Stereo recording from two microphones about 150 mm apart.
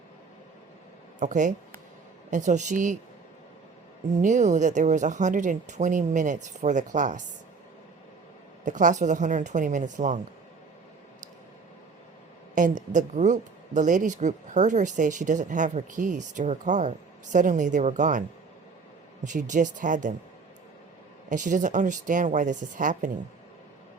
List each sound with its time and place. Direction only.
1.2 s speech: 55° right (ahead or behind)
4.1 s speech: 55° right (ahead or behind)
8.6 s speech: 55° right (ahead or behind)
12.5 s speech: 60° right (ahead or behind)
19.2 s speech: 55° right (ahead or behind)
21.2 s speech: 55° right (ahead or behind)